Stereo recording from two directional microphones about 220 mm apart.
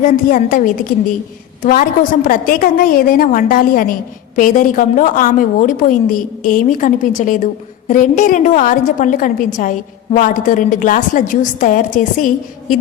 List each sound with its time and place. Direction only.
0.0 s a woman's voice: 40° left (ahead or behind)